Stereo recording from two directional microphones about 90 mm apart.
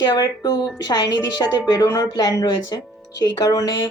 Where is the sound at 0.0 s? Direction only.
50° left (ahead or behind).